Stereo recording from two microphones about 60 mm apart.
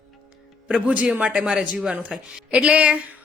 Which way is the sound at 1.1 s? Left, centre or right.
Right.